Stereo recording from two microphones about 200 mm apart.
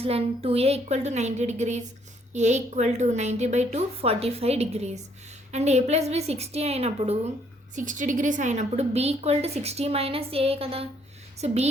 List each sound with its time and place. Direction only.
0.0 s a woman's voice: 30° right (ahead or behind)